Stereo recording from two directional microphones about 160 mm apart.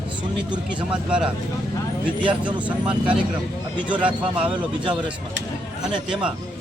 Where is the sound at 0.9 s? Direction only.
5° right (ahead or behind).